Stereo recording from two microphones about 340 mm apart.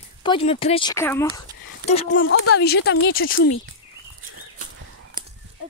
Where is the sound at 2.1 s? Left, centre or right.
Left.